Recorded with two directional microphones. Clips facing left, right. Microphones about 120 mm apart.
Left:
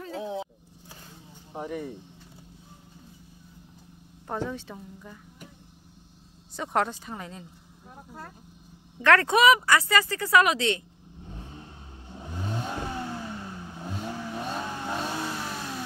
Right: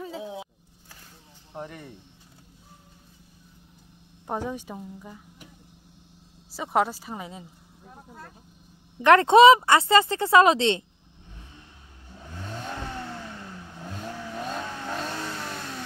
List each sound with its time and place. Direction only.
0.0 s roaring cats: 5° right (ahead or behind)
1.5 s speech: 10° left (ahead or behind)
4.3 s speech: 15° right (ahead or behind)
6.5 s speech: 5° right (ahead or behind)
9.0 s speech: 20° right (ahead or behind)
11.2 s vehicle: 40° left (ahead or behind)
12.1 s vehicle: 20° left (ahead or behind); by 15.8 s 5° left (ahead or behind)